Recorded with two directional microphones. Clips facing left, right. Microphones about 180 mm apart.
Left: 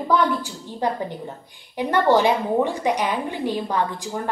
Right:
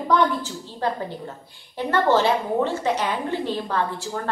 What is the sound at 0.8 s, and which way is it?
A woman's voice, 15° left (ahead or behind).